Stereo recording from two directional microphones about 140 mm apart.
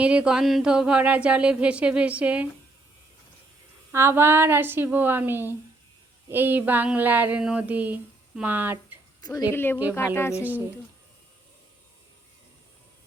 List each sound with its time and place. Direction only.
0.0 s speech: 10° right (ahead or behind)
3.9 s speech: 15° right (ahead or behind)
9.2 s speech: 25° left (ahead or behind)
10.3 s speech: 10° right (ahead or behind)